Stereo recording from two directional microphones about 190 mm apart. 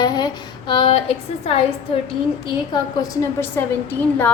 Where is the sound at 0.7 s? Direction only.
30° left (ahead or behind).